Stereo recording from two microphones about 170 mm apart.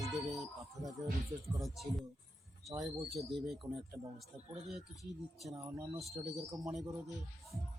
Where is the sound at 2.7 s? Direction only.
30° right (ahead or behind).